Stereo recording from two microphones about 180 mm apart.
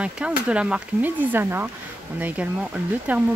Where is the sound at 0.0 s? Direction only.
5° right (ahead or behind).